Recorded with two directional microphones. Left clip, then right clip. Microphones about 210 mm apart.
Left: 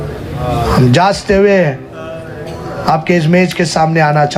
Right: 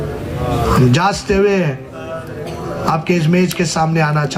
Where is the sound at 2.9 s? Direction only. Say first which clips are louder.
Left 6 dB; 35° left (ahead or behind).